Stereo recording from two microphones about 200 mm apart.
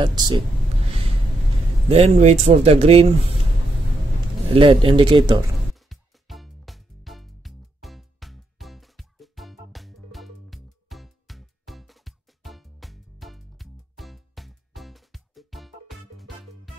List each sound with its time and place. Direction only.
0.0 s speech: 20° right (ahead or behind)
1.9 s speech: 30° right (ahead or behind)
4.5 s speech: 25° right (ahead or behind)
5.9 s music: centre (ahead or behind)